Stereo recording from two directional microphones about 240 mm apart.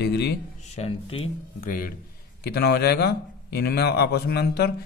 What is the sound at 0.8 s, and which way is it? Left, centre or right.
Speech, left.